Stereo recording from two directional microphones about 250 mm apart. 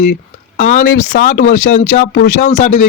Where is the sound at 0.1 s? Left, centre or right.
Left.